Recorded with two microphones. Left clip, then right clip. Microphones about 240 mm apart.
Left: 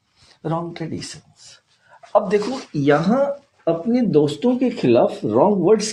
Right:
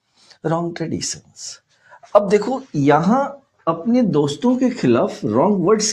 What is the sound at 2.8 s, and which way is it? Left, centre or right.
Speech, right.